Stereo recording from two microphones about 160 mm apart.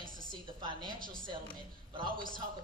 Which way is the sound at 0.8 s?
60° right (ahead or behind).